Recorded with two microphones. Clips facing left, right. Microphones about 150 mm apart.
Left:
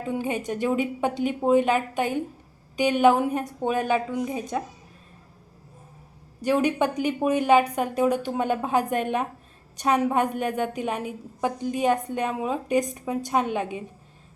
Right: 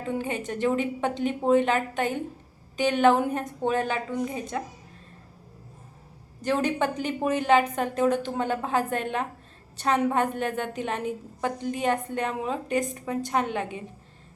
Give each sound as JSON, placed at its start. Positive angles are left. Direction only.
{"t": 0.1, "sound": "a woman's voice", "side_deg": 10}
{"t": 6.4, "sound": "a woman's voice", "side_deg": 10}